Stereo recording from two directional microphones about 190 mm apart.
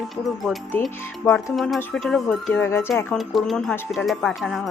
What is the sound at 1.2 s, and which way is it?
Speech, 10° left (ahead or behind).